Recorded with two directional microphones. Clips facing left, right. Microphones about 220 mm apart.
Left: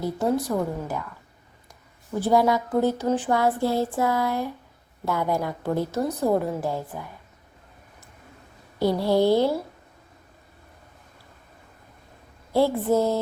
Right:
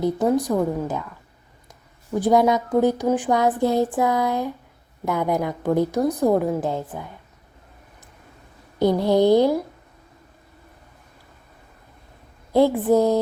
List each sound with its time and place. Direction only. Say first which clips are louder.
0.0 s a woman's voice: right 4 dB; 20° right (ahead or behind)
2.1 s a woman's voice: right 3 dB; 15° right (ahead or behind)
8.8 s a woman's voice: right 3 dB; 20° right (ahead or behind)
12.5 s a woman's voice: right 4 dB; 15° right (ahead or behind)